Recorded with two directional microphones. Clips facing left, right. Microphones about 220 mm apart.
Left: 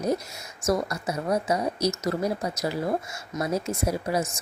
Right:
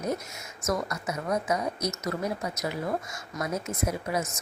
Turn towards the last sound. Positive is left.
turn(degrees=35)  # may be behind; listen again after turning